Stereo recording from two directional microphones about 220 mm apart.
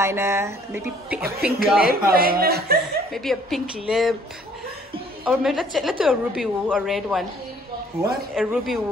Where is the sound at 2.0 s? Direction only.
40° right (ahead or behind).